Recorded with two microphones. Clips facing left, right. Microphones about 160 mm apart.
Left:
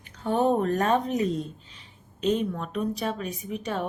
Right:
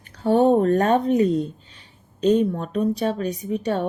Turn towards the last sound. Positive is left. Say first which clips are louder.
# right 7 dB
turn(degrees=-35)  # may be behind; listen again after turning